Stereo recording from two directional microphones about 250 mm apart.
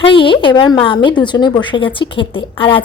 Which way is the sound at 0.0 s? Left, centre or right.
Left.